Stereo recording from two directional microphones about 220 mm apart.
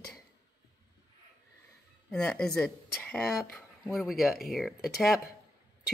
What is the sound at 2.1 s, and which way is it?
Speech, 5° left (ahead or behind).